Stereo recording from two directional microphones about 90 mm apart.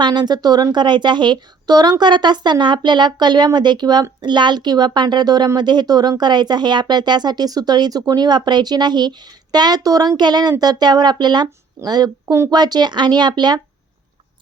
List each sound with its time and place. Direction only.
0.0 s a woman's voice: 55° right (ahead or behind)